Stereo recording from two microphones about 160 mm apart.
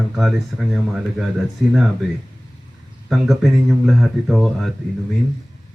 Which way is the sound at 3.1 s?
Centre (ahead or behind).